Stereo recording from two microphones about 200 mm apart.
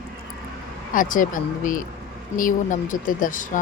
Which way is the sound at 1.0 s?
40° left (ahead or behind).